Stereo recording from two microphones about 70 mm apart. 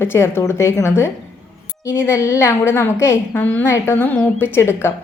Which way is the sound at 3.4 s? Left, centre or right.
Left.